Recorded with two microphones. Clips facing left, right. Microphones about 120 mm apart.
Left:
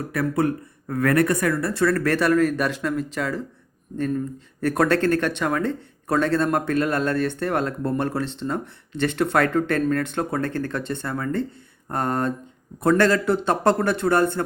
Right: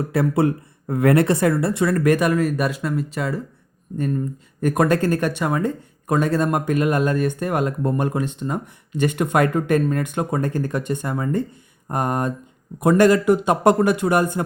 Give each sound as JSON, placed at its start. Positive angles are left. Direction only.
{"t": 0.1, "sound": "speech", "side_deg": -25}